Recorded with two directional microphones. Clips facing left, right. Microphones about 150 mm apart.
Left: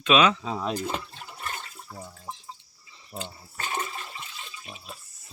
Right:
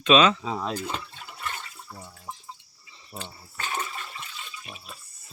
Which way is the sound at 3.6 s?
20° left (ahead or behind).